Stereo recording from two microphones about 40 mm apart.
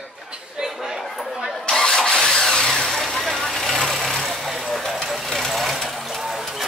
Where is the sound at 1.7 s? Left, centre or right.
Centre.